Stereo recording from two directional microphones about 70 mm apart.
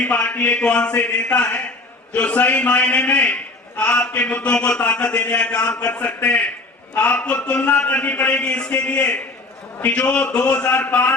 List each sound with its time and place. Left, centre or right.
0.0 s a man's voice: left